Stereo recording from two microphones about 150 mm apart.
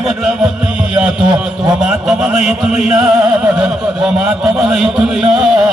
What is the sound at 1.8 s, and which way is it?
Speech, 5° right (ahead or behind).